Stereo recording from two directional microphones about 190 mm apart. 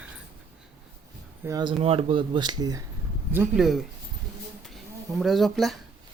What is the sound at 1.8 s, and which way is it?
Speech, 30° right (ahead or behind).